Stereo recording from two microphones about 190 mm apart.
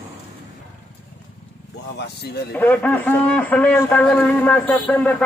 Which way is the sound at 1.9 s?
60° left (ahead or behind).